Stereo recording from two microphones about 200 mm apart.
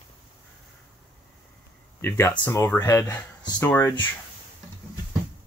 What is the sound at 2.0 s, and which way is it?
Speech, 10° left (ahead or behind).